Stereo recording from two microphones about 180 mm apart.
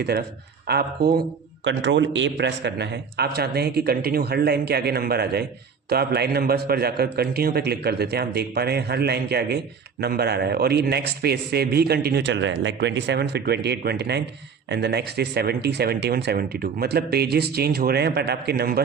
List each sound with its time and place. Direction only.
0.0 s a man's voice: 60° right (ahead or behind)
1.6 s a man's voice: 90° right; by 18.8 s 60° right (ahead or behind)